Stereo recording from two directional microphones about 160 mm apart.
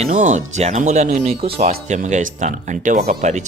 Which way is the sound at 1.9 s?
50° right (ahead or behind).